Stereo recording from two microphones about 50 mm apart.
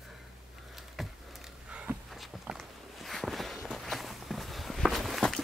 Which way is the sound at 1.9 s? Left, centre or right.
Right.